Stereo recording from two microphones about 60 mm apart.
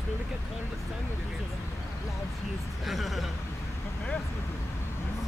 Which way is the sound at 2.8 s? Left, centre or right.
Centre.